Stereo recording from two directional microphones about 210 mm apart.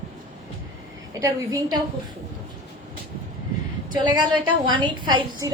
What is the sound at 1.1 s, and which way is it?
Speech, 15° right (ahead or behind).